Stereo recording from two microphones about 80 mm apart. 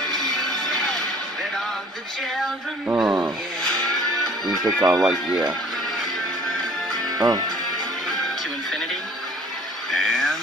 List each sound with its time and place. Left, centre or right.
2.9 s speech: right
4.2 s music: centre
4.9 s speech: centre
7.2 s speech: right
9.8 s speech: centre